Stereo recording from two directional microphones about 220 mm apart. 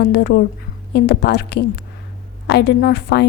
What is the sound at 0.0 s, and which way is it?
A woman's voice, 50° left (ahead or behind).